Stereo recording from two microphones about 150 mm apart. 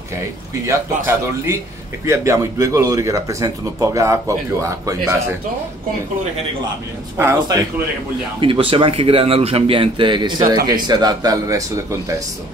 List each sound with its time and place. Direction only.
0.7 s a man's voice: 20° right (ahead or behind)
7.2 s a man's voice: 15° right (ahead or behind)
8.4 s speech: 35° right (ahead or behind); by 11.8 s 20° right (ahead or behind)